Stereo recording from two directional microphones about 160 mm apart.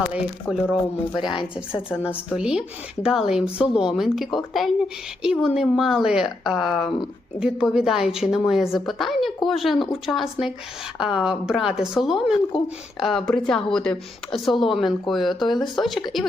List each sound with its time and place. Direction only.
0.4 s a woman's voice: centre (ahead or behind)
1.1 s a woman's voice: 30° left (ahead or behind)
2.0 s a woman's voice: 5° right (ahead or behind)